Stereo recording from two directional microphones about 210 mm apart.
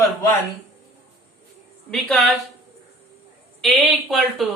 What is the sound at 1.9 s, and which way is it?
Speech, centre (ahead or behind).